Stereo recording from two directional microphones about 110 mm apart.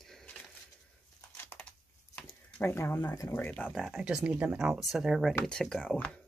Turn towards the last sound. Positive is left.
turn(degrees=10)  # may be behind; listen again after turning